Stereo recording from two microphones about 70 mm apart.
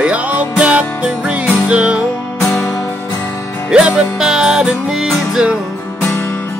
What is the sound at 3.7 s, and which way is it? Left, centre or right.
Music, centre.